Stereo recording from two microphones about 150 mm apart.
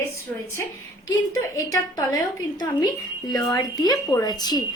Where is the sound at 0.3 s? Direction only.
5° left (ahead or behind).